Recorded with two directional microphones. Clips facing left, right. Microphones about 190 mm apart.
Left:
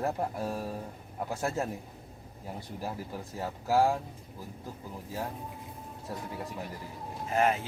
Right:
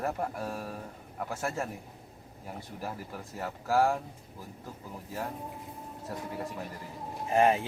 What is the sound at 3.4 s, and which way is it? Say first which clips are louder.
Speech: left 1 dB; 20° left (ahead or behind).